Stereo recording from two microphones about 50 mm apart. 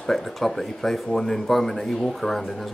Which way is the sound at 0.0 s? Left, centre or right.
Centre.